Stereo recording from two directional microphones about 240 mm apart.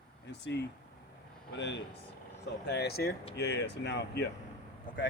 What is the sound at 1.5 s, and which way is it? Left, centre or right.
Speech, left.